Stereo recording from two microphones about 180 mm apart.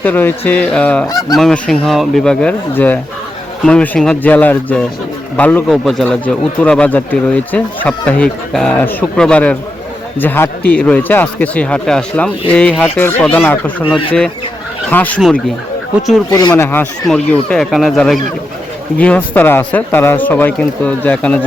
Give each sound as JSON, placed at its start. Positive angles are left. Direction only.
{"t": 0.0, "sound": "a man's voice", "side_deg": 10}
{"t": 1.0, "sound": "fowl", "side_deg": 20}
{"t": 1.4, "sound": "a man's voice", "side_deg": 5}
{"t": 14.8, "sound": "a man's voice", "side_deg": 10}
{"t": 16.3, "sound": "a man's voice", "side_deg": 20}